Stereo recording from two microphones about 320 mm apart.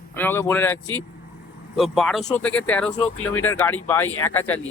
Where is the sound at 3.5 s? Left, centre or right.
Centre.